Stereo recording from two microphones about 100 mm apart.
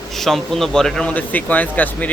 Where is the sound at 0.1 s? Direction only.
Centre (ahead or behind).